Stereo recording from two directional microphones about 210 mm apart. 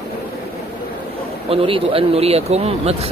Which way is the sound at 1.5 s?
25° right (ahead or behind).